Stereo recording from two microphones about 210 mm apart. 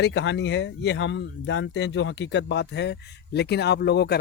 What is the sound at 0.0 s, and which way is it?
Speech, 55° left (ahead or behind).